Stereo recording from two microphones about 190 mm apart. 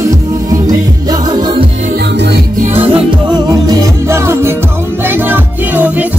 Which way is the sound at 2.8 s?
20° right (ahead or behind).